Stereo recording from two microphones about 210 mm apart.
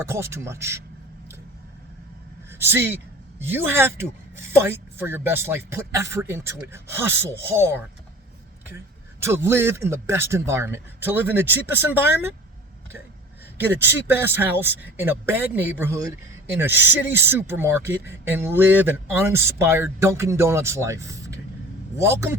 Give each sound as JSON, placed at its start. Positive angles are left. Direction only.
{"t": 0.0, "sound": "speech", "side_deg": -15}
{"t": 2.5, "sound": "speech", "side_deg": -10}
{"t": 9.2, "sound": "speech", "side_deg": -10}
{"t": 13.6, "sound": "speech", "side_deg": -10}